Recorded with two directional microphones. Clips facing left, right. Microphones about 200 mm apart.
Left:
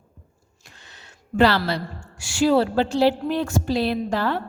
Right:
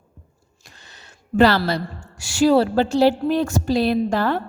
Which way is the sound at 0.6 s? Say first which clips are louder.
Right 1 dB; 40° right (ahead or behind).